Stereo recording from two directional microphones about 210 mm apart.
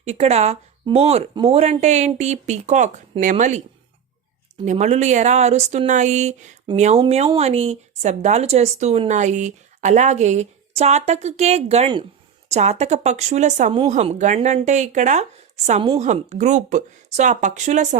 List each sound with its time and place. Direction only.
0.0 s speech: 30° right (ahead or behind)
4.6 s speech: 35° right (ahead or behind)